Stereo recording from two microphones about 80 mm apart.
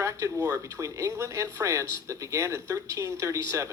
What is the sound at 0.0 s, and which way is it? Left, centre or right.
Speech, right.